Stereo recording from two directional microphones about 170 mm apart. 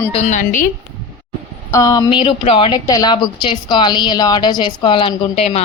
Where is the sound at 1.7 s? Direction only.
20° left (ahead or behind).